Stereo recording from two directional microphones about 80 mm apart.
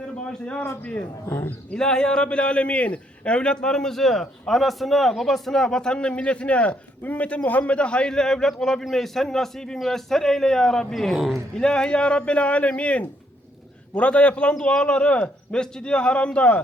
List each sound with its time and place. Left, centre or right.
0.3 s a man's voice: centre
0.6 s a man's voice: left
1.7 s a man's voice: centre